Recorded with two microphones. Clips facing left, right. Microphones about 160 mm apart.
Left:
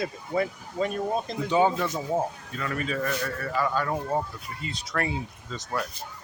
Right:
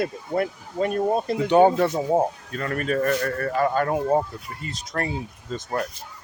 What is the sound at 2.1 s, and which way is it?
A man's voice, 45° right (ahead or behind).